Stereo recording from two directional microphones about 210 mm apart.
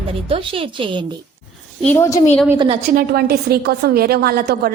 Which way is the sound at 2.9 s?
50° right (ahead or behind).